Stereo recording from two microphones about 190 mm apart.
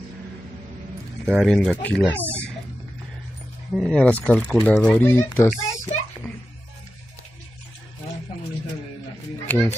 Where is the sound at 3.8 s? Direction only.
5° left (ahead or behind).